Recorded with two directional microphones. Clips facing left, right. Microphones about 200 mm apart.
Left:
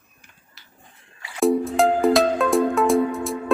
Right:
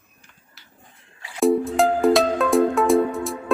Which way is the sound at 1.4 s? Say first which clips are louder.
Even; centre (ahead or behind).